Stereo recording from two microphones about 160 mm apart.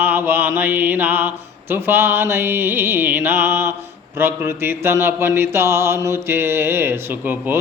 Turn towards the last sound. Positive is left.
turn(degrees=-10)  # may be behind; listen again after turning